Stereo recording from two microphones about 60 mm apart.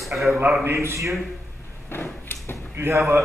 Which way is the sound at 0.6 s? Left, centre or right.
Right.